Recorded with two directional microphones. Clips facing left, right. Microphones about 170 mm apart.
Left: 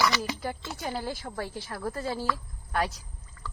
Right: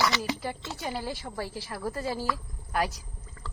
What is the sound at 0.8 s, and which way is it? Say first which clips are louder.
A woman's voice: left 1 dB; centre (ahead or behind).